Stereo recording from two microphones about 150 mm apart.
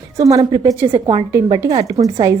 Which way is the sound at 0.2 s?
25° right (ahead or behind).